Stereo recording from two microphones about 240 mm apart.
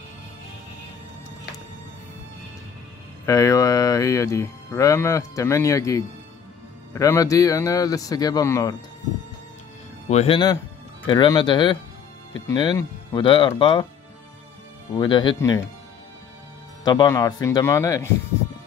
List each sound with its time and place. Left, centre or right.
3.3 s speech: centre
10.0 s speech: left
15.0 s speech: centre
16.8 s speech: centre